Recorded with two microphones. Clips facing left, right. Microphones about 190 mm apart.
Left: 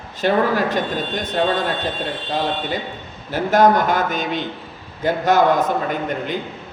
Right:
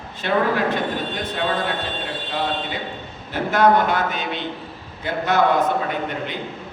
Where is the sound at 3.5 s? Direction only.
45° left (ahead or behind).